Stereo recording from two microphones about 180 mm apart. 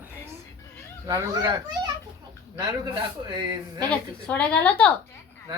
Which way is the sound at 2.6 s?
25° right (ahead or behind).